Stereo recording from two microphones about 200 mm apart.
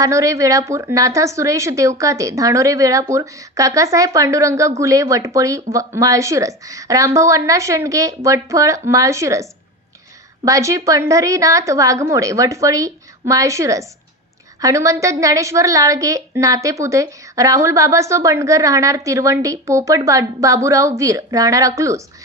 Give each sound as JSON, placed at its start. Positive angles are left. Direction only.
{"t": 0.0, "sound": "a woman's voice", "side_deg": -15}